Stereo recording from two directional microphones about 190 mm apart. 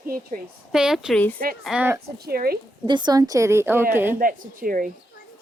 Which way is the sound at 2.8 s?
25° right (ahead or behind).